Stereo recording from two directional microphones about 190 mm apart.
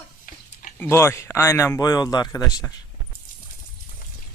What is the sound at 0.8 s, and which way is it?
Speech, 15° left (ahead or behind).